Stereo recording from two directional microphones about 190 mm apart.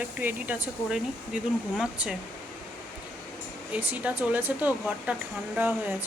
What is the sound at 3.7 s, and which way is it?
Speech, 10° right (ahead or behind).